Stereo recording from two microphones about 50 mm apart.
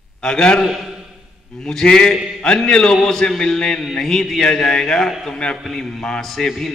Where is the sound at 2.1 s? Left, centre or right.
Centre.